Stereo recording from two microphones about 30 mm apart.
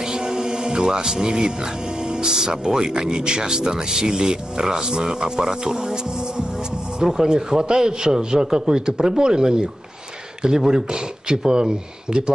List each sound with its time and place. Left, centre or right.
0.0 s speech: right